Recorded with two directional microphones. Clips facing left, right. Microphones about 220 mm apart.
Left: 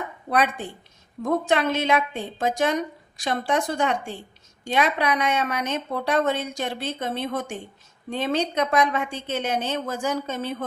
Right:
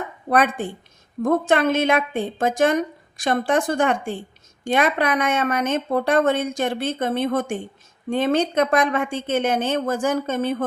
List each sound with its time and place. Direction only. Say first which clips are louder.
0.3 s speech: right 4 dB; 50° right (ahead or behind)